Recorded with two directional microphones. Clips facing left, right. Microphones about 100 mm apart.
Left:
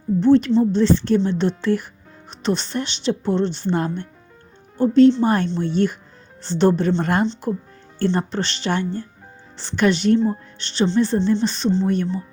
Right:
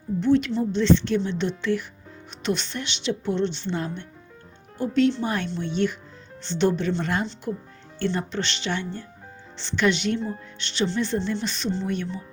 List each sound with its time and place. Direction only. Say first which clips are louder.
0.2 s a woman's voice: left 6 dB; 35° left (ahead or behind)
4.8 s a woman's voice: left 8 dB; 35° left (ahead or behind)